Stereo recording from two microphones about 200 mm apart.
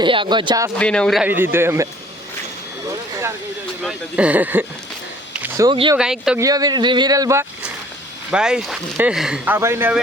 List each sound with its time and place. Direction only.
0.0 s speech: 25° right (ahead or behind)
0.8 s a man's voice: 5° left (ahead or behind); by 1.9 s 10° right (ahead or behind)
3.8 s a man's voice: 5° right (ahead or behind)
5.4 s a sound: 15° right (ahead or behind)
6.0 s speech: 5° right (ahead or behind)
6.4 s speech: 20° right (ahead or behind)
8.3 s speech: 5° right (ahead or behind)